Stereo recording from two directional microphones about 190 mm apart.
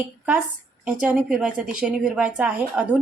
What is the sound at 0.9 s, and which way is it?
A woman's voice, 5° right (ahead or behind).